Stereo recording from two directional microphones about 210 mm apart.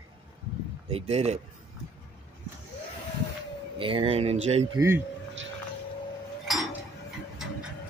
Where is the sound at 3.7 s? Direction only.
25° right (ahead or behind).